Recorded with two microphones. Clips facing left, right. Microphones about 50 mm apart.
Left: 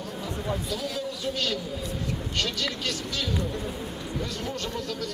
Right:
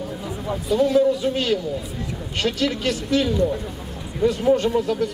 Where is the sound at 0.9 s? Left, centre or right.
Right.